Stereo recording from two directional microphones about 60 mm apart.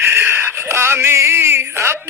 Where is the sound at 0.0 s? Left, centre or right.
Right.